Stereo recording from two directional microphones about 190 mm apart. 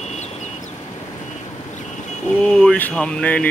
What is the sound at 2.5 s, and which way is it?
Speech, 5° left (ahead or behind).